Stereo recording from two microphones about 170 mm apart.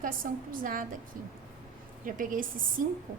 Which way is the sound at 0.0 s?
55° right (ahead or behind).